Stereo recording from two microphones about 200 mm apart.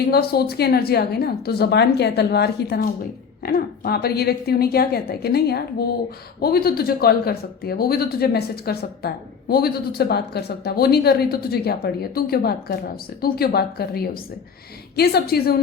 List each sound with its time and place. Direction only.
0.1 s speech: 50° left (ahead or behind)